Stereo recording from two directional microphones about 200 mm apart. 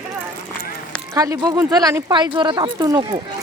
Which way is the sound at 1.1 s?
20° right (ahead or behind).